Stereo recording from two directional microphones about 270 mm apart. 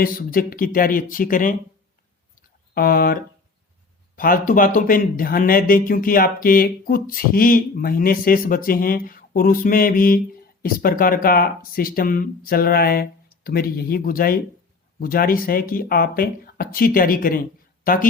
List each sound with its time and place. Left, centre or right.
0.0 s speech: left
2.3 s a sound: left
4.1 s speech: left